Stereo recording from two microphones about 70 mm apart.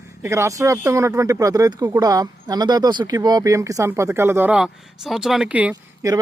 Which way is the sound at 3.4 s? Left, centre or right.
Right.